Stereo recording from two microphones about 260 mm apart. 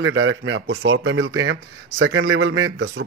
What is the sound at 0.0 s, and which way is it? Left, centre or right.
Speech, right.